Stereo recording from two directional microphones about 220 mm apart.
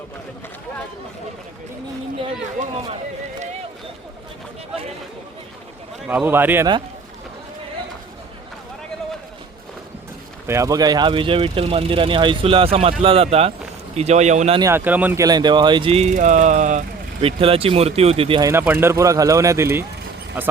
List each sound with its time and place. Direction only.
2.2 s speech: 25° right (ahead or behind)
6.1 s a man's voice: 10° right (ahead or behind)
10.4 s speech: 15° right (ahead or behind); by 14.6 s 30° right (ahead or behind)
14.6 s a man's voice: 10° right (ahead or behind)